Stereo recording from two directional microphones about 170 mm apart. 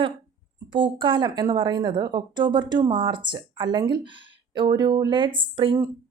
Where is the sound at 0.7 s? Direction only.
30° right (ahead or behind).